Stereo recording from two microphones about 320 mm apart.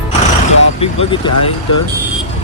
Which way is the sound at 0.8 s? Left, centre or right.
Centre.